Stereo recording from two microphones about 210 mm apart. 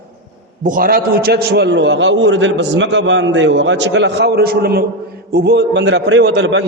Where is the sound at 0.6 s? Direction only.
40° right (ahead or behind).